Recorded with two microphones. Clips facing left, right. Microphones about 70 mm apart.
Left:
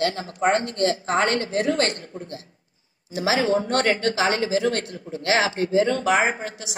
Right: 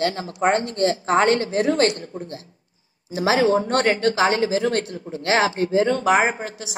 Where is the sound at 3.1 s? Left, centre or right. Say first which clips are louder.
Right 3 dB; right.